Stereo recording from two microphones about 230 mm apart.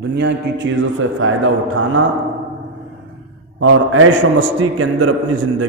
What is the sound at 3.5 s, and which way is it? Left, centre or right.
A man's voice, right.